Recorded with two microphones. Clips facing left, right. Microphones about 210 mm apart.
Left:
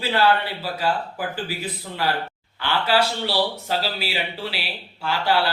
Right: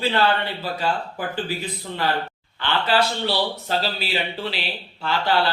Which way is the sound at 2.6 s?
10° left (ahead or behind).